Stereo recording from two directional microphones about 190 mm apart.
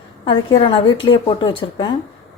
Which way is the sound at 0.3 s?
30° left (ahead or behind).